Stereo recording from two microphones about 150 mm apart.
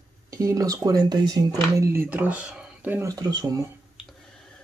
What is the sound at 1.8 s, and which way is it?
Speech, 15° right (ahead or behind).